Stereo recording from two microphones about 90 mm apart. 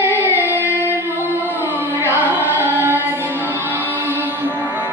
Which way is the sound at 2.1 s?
20° right (ahead or behind).